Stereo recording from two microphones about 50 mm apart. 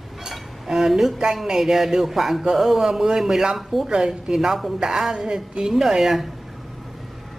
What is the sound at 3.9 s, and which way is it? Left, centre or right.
Speech, centre.